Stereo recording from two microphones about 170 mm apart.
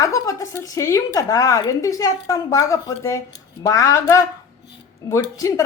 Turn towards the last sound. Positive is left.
turn(degrees=20)  # may be behind; listen again after turning